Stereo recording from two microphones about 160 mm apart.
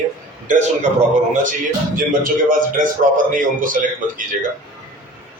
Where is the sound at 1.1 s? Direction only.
50° right (ahead or behind).